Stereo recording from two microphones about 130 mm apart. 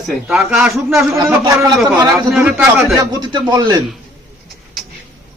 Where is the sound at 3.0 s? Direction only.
30° right (ahead or behind).